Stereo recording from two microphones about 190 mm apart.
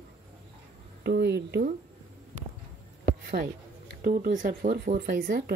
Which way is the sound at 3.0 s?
50° right (ahead or behind).